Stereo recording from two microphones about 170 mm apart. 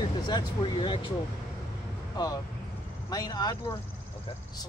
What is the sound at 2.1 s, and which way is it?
Speech, 20° left (ahead or behind).